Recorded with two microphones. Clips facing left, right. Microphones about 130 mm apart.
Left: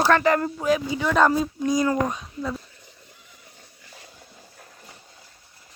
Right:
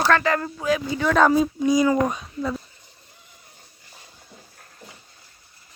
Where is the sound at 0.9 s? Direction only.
5° left (ahead or behind).